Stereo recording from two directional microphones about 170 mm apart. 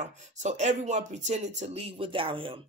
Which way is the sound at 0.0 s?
45° right (ahead or behind).